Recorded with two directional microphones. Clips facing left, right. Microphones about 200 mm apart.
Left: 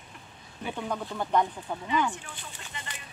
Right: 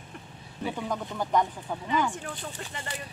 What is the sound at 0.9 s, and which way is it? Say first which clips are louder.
Speech: even; centre (ahead or behind).